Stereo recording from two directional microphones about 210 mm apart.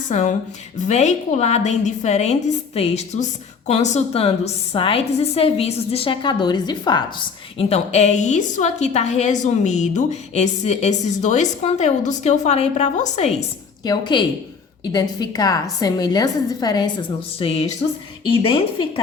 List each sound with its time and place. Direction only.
0.1 s a woman's voice: 35° left (ahead or behind); by 7.0 s 20° left (ahead or behind)
7.6 s a woman's voice: 30° left (ahead or behind)
13.8 s a woman's voice: 20° left (ahead or behind)